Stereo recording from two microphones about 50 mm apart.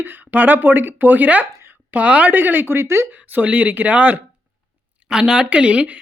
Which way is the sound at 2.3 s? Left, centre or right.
Right.